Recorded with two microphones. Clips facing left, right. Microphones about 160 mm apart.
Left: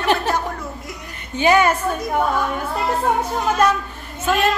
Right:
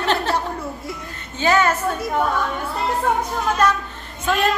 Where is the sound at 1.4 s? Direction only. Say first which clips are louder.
Left 2 dB; 15° left (ahead or behind).